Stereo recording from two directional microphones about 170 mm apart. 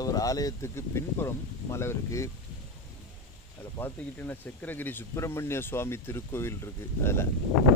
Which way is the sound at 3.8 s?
10° left (ahead or behind).